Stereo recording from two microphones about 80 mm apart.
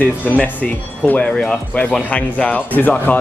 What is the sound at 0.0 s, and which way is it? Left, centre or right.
Speech, left.